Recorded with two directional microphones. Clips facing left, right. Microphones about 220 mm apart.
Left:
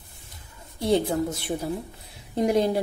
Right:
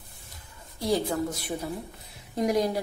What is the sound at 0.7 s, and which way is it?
Speech, 25° left (ahead or behind).